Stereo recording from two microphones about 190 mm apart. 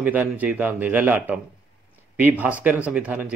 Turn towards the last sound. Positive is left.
turn(degrees=-10)  # may be behind; listen again after turning